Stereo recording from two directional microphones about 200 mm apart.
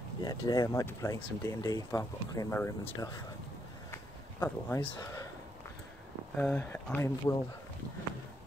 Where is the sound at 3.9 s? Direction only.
15° left (ahead or behind).